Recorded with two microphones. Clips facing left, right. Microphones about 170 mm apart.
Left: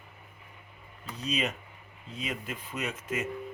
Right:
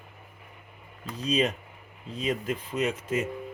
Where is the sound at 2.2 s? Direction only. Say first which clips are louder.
Right 8 dB; 35° right (ahead or behind).